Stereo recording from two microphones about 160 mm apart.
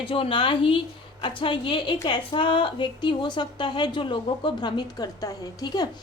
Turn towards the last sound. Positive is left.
turn(degrees=25)  # may be behind; listen again after turning